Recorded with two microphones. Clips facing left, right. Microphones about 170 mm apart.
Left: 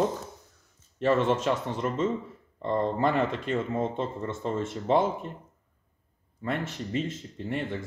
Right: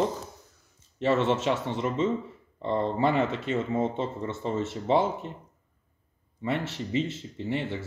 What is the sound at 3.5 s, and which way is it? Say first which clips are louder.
Speech: even; 55° left (ahead or behind).